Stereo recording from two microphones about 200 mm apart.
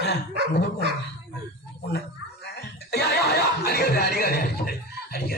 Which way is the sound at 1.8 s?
55° left (ahead or behind).